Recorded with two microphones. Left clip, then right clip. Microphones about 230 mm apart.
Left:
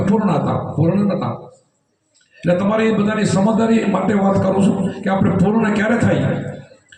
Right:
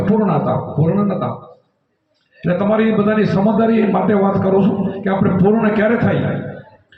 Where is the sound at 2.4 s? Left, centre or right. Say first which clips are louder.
Even; left.